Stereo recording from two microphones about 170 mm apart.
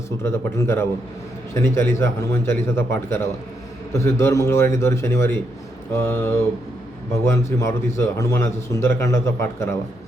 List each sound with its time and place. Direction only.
0.2 s a man's voice: 15° left (ahead or behind)